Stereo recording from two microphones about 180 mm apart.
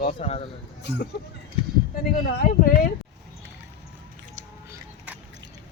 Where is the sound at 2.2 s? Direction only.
55° left (ahead or behind).